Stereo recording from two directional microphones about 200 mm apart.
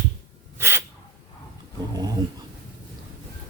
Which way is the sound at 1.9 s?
20° right (ahead or behind).